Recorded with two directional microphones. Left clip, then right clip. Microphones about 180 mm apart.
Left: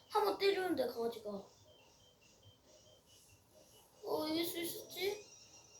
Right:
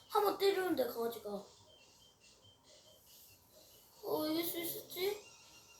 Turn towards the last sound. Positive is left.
turn(degrees=-30)  # may be behind; listen again after turning